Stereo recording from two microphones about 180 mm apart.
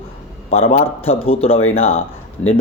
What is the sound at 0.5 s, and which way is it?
Speech, 35° left (ahead or behind).